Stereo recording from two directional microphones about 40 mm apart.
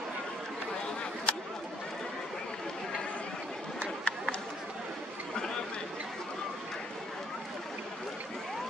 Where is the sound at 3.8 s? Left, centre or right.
Left.